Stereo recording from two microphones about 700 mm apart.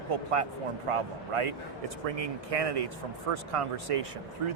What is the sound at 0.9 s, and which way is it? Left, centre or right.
Speech, right.